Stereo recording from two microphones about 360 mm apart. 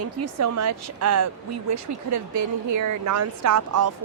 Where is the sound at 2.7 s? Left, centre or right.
Right.